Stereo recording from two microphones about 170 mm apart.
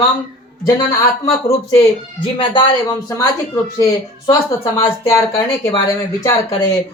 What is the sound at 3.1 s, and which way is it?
Speech, 20° left (ahead or behind).